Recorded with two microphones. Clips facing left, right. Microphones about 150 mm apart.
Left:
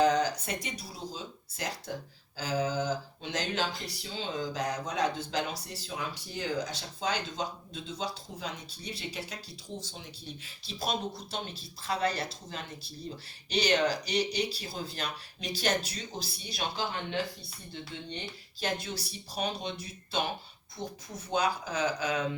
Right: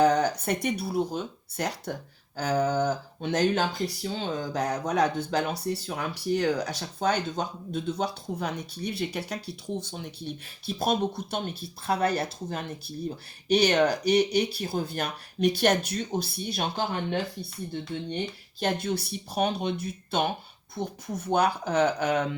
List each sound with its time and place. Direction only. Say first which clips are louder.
0.0 s speech: right 4 dB; 60° right (ahead or behind)